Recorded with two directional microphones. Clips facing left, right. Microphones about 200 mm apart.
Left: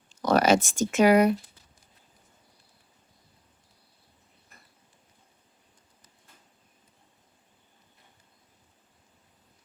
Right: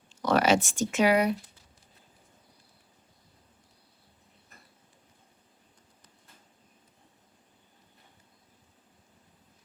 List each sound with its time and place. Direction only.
0.1 s speech: 40° left (ahead or behind)